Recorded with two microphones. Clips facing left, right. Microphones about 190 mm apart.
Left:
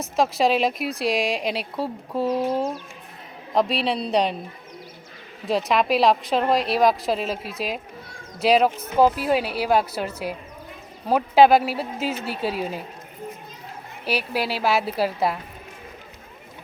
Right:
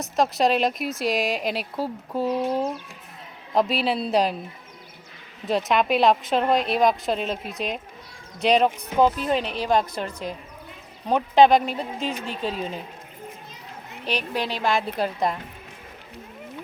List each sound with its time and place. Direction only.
0.2 s speech: centre (ahead or behind)
5.5 s speech: centre (ahead or behind)
14.0 s speech: 5° left (ahead or behind)